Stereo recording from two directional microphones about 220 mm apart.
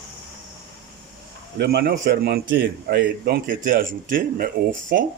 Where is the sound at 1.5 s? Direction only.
50° right (ahead or behind).